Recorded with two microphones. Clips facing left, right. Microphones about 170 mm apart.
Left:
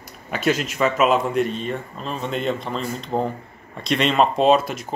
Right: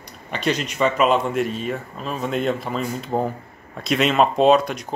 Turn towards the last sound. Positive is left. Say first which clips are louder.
# right 1 dB
turn(degrees=0)  # may be behind; listen again after turning